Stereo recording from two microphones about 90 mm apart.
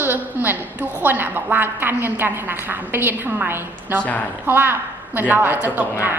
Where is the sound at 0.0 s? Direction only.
20° right (ahead or behind).